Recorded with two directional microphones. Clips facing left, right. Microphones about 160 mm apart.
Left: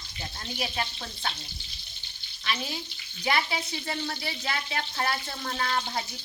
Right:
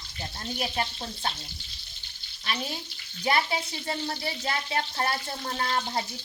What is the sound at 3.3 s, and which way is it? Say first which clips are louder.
Speech: right 2 dB; 35° right (ahead or behind).